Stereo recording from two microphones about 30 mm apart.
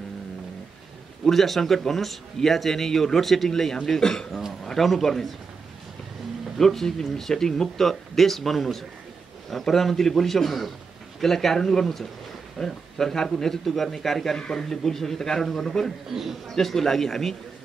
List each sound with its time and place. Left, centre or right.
1.2 s a man's voice: centre
4.0 s a man's voice: centre
4.6 s a man's voice: centre
6.6 s a man's voice: centre
13.7 s a man's voice: centre
16.1 s a man's voice: centre
16.4 s a man's voice: centre